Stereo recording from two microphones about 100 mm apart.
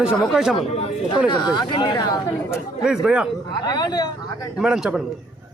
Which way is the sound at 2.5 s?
5° right (ahead or behind).